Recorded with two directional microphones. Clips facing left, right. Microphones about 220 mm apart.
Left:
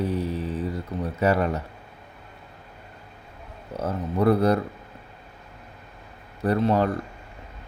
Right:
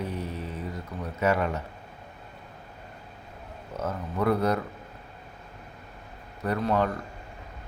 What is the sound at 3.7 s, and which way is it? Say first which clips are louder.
Speech: left 5 dB; 30° left (ahead or behind).